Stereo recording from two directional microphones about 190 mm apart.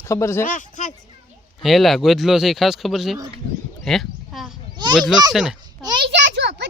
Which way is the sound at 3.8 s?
Centre (ahead or behind).